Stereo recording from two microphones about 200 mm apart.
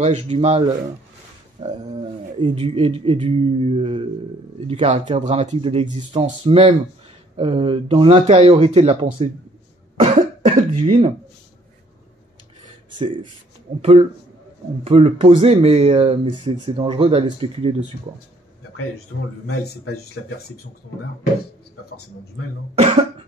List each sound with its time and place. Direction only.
0.0 s speech: 35° right (ahead or behind)
1.6 s speech: 20° right (ahead or behind)
10.4 s speech: 30° right (ahead or behind)
13.0 s speech: 25° right (ahead or behind)
19.4 s speech: 55° left (ahead or behind)